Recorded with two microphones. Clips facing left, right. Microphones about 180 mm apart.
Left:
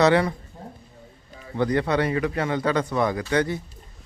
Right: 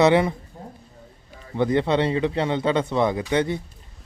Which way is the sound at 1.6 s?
25° right (ahead or behind).